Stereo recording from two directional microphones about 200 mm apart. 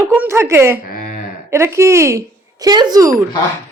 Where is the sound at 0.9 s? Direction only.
45° left (ahead or behind).